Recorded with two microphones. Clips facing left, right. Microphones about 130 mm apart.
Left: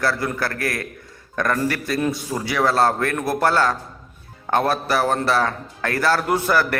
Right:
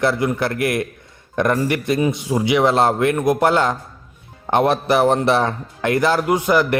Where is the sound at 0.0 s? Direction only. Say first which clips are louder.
Right 4 dB; 20° right (ahead or behind).